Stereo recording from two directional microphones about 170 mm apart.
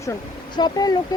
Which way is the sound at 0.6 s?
20° left (ahead or behind).